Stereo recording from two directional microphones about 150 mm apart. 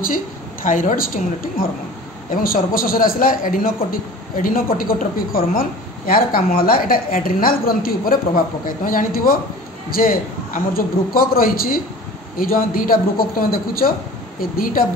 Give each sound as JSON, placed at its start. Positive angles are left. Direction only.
{"t": 0.7, "sound": "a woman's voice", "side_deg": 65}